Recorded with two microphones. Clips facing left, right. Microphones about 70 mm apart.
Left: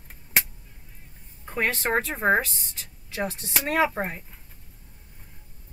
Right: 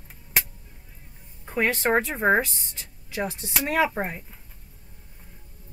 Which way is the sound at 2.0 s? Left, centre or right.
Centre.